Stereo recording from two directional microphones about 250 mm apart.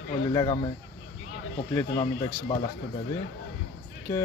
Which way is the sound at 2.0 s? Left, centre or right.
Left.